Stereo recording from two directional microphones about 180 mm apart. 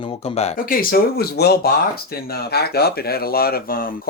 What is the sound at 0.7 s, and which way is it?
Speech, 55° left (ahead or behind).